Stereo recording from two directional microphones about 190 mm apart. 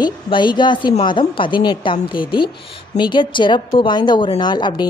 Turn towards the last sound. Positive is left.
turn(degrees=25)  # may be behind; listen again after turning